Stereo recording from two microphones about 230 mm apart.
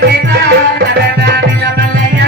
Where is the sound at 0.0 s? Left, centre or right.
Right.